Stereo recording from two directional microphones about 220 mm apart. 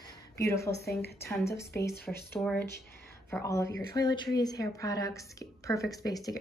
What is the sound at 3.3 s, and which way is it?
A woman's voice, 15° left (ahead or behind).